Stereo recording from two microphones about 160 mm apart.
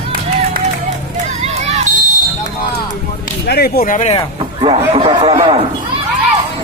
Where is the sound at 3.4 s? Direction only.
85° left.